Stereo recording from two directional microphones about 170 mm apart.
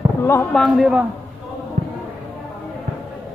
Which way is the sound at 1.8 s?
55° right (ahead or behind).